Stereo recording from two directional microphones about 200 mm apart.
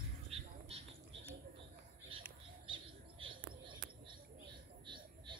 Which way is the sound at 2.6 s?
25° right (ahead or behind).